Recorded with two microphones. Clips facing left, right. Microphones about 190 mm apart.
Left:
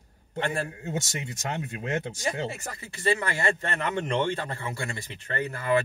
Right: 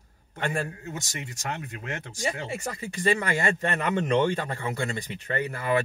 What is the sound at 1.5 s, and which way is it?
Speech, 25° left (ahead or behind).